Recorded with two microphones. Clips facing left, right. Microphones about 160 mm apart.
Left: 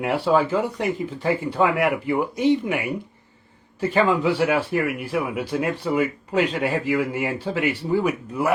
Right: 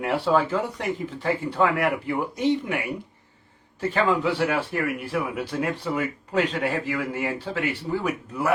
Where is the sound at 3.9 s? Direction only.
10° left (ahead or behind).